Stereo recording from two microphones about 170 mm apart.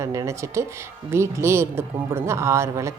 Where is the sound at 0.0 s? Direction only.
20° right (ahead or behind).